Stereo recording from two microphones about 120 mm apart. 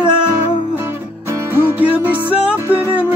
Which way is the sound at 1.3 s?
15° right (ahead or behind).